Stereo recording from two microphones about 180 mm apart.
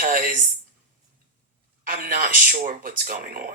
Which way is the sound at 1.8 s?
55° right (ahead or behind).